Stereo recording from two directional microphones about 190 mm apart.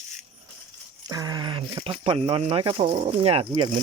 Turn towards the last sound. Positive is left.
turn(degrees=-25)  # may be behind; listen again after turning